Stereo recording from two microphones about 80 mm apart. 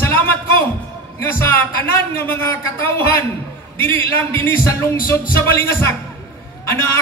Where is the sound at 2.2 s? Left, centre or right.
Left.